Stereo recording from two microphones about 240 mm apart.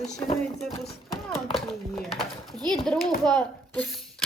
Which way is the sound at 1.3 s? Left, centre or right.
Centre.